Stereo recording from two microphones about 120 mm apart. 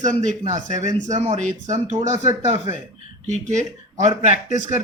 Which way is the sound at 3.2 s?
80° right.